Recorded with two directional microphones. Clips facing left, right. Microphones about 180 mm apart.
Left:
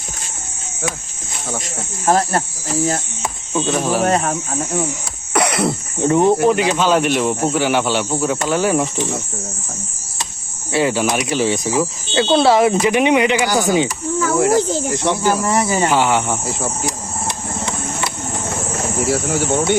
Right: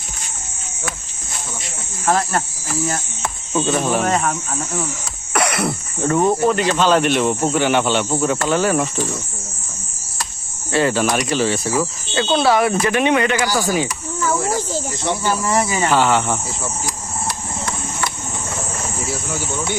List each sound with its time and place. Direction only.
1.6 s speech: 40° left (ahead or behind)
3.5 s speech: centre (ahead or behind)
4.0 s speech: 35° left (ahead or behind)
5.3 s speech: 20° left (ahead or behind)
10.7 s speech: 10° left (ahead or behind)
14.2 s speech: 60° left (ahead or behind)
15.9 s speech: 15° left (ahead or behind)
18.9 s speech: 65° left (ahead or behind)